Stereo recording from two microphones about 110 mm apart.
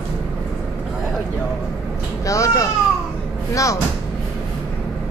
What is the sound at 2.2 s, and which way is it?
Baby cry, 30° left (ahead or behind).